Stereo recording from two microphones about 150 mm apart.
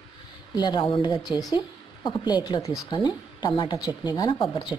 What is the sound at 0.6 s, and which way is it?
Speech, 30° left (ahead or behind).